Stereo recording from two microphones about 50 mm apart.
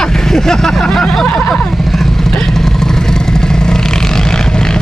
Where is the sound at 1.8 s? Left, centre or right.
Centre.